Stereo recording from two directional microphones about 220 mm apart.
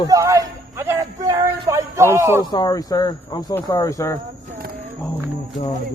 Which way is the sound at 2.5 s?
20° left (ahead or behind).